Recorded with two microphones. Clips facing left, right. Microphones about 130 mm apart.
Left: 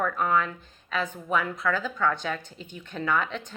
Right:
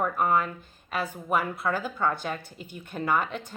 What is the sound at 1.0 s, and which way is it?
Speech, 10° right (ahead or behind).